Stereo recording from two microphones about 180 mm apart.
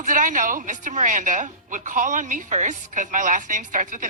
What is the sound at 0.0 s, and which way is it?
A woman's voice, 45° right (ahead or behind).